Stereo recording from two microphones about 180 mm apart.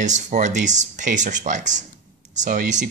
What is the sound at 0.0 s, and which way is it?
Speech, 40° right (ahead or behind).